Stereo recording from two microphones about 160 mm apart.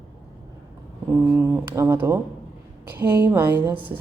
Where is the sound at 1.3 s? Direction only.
15° right (ahead or behind).